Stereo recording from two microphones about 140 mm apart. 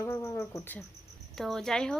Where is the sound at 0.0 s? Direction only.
15° left (ahead or behind).